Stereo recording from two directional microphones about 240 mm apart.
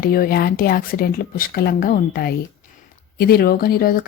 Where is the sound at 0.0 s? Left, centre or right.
Left.